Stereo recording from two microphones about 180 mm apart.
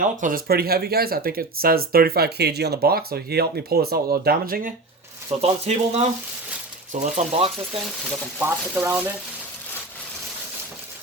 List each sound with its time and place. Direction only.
0.0 s speech: 50° right (ahead or behind)
5.4 s speech: 35° right (ahead or behind)
8.4 s speech: 10° right (ahead or behind)